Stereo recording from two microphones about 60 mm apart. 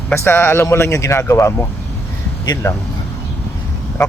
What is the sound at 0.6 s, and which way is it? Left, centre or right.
Speech, left.